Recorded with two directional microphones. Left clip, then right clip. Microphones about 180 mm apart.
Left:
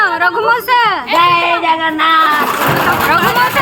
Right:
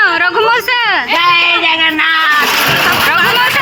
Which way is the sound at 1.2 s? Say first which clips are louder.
Even; 20° left (ahead or behind).